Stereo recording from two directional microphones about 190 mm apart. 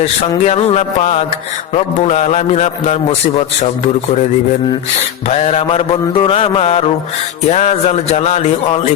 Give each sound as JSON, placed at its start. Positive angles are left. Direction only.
{"t": 0.0, "sound": "a man's voice", "side_deg": 35}
{"t": 5.3, "sound": "a man's voice", "side_deg": 35}